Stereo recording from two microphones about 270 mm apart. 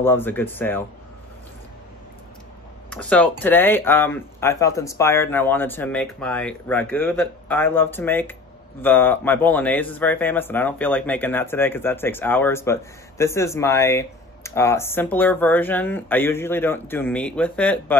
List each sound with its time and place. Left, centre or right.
0.0 s speech: centre
2.9 s speech: centre